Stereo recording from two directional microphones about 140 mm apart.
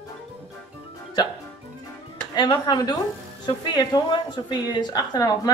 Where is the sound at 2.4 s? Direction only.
30° left (ahead or behind).